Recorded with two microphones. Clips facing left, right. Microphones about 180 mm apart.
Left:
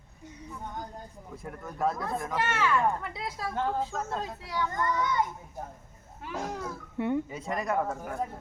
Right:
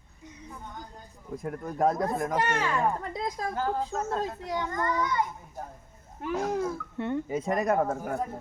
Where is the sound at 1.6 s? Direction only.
45° right (ahead or behind).